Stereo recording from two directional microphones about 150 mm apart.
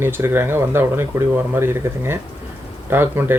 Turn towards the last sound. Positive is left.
turn(degrees=-15)  # may be behind; listen again after turning